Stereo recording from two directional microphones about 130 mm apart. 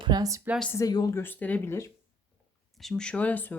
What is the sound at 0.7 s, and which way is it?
Speech, 25° left (ahead or behind).